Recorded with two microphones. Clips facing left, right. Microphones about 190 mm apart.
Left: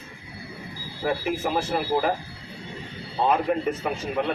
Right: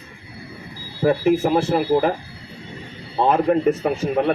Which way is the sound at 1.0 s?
50° right (ahead or behind).